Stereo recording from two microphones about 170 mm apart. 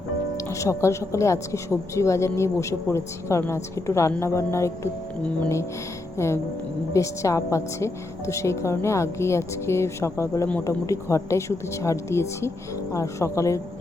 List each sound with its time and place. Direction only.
0.6 s a woman's voice: 15° left (ahead or behind)